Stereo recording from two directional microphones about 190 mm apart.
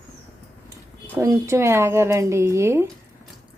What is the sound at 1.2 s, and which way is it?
Speech, 15° right (ahead or behind).